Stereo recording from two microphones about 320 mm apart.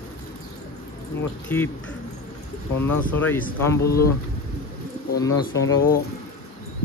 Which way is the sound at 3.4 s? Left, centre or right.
Left.